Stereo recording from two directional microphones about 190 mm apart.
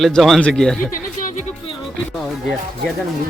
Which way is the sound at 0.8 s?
45° left (ahead or behind).